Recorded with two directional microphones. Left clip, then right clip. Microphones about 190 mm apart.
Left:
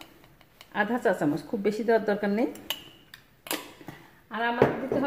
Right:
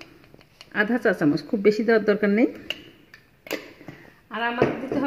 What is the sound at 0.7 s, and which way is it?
A woman's voice, 40° right (ahead or behind).